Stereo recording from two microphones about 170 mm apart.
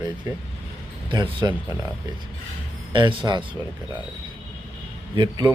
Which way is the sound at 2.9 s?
30° right (ahead or behind).